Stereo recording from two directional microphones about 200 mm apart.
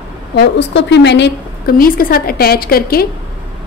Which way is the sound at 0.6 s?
60° left (ahead or behind).